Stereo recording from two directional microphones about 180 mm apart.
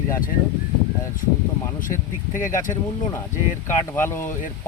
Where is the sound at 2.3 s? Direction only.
45° left (ahead or behind).